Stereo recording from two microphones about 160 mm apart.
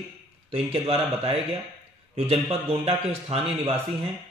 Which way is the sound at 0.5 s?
35° right (ahead or behind).